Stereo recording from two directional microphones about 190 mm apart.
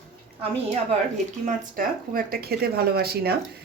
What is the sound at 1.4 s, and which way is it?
Speech, 45° right (ahead or behind).